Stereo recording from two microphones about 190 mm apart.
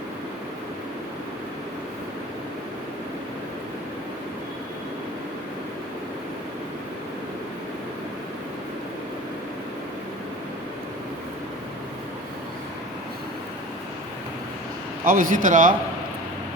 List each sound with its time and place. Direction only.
15.0 s a man's voice: 45° right (ahead or behind)